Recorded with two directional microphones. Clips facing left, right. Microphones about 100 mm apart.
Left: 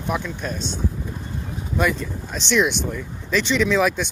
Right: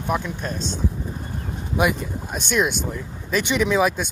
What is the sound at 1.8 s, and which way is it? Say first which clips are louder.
Speech: right 1 dB; 10° right (ahead or behind).